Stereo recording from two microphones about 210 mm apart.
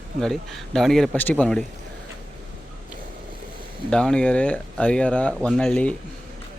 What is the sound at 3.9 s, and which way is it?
Speech, 5° left (ahead or behind).